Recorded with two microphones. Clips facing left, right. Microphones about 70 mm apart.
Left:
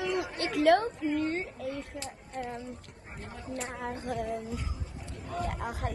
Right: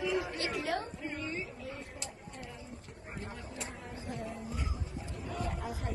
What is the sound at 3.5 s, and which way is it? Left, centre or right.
Speech, left.